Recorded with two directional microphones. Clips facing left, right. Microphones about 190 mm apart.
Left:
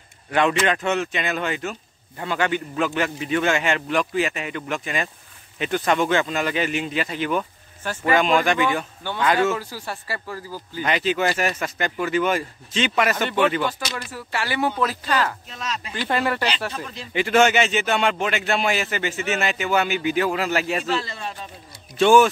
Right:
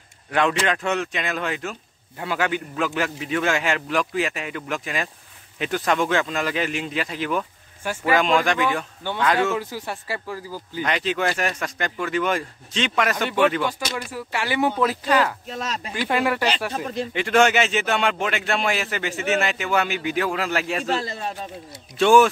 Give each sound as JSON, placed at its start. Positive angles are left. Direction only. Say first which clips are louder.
{"t": 0.3, "sound": "speech", "louder": "left 1 dB", "side_deg": 0}
{"t": 9.6, "sound": "speech", "louder": "right 2 dB", "side_deg": -20}
{"t": 10.8, "sound": "speech", "louder": "left 2 dB", "side_deg": 5}
{"t": 14.1, "sound": "speech", "louder": "right 1 dB", "side_deg": -15}
{"t": 15.4, "sound": "a man's voice", "louder": "right 2 dB", "side_deg": -45}
{"t": 15.9, "sound": "speech", "louder": "right 1 dB", "side_deg": -10}
{"t": 16.7, "sound": "a man's voice", "louder": "right 7 dB", "side_deg": -50}
{"t": 17.1, "sound": "speech", "louder": "left 1 dB", "side_deg": 5}
{"t": 20.9, "sound": "a man's voice", "louder": "right 1 dB", "side_deg": -45}
{"t": 21.9, "sound": "speech", "louder": "even", "side_deg": 0}